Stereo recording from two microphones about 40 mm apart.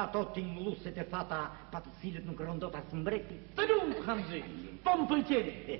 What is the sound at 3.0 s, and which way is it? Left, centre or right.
A man's voice, centre.